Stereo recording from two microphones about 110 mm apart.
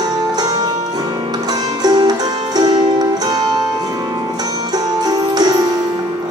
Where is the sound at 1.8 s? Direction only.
40° right (ahead or behind).